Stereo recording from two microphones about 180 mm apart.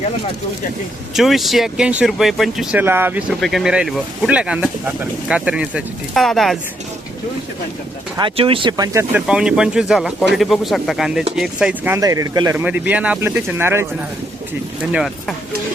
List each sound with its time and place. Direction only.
1.1 s speech: centre (ahead or behind)
2.8 s speech: 10° right (ahead or behind)
8.2 s speech: 30° right (ahead or behind)
9.2 s speech: 5° right (ahead or behind)
14.9 s speech: centre (ahead or behind)